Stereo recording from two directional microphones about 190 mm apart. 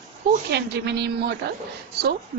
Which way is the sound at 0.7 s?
60° right (ahead or behind).